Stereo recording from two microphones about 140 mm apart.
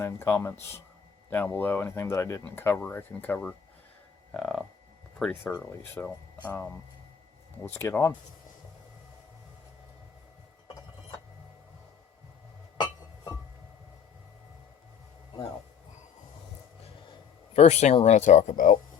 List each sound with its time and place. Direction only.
0.0 s speech: 20° left (ahead or behind)
4.4 s a sound: 5° left (ahead or behind)
5.2 s speech: 15° left (ahead or behind)
12.7 s music: 25° left (ahead or behind)
17.1 s speech: 45° left (ahead or behind); by 18.8 s 70° left (ahead or behind)